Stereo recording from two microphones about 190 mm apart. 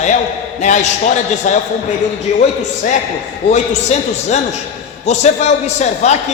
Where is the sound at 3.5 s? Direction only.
35° left (ahead or behind).